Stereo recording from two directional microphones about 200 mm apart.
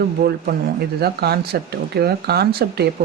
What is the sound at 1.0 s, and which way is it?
Speech, 50° right (ahead or behind).